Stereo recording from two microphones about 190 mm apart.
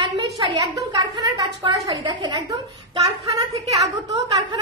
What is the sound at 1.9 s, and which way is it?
Speech, 25° right (ahead or behind).